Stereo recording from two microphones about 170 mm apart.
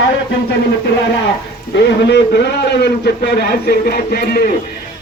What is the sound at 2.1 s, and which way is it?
A man's voice, 80° left.